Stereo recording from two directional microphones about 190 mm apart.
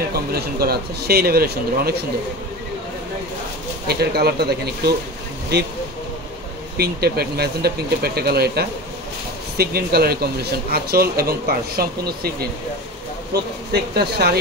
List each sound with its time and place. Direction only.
0.3 s speech: 55° right (ahead or behind)
3.8 s speech: 55° right (ahead or behind)
6.8 s speech: 55° right (ahead or behind)